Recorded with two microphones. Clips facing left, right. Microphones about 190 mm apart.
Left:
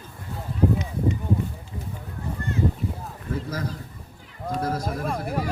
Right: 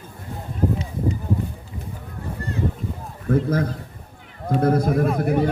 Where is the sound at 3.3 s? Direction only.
55° right (ahead or behind).